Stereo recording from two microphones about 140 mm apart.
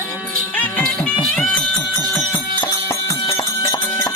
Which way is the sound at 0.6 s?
10° left (ahead or behind).